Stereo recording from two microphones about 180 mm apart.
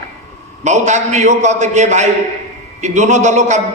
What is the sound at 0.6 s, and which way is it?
A man's voice, 40° right (ahead or behind).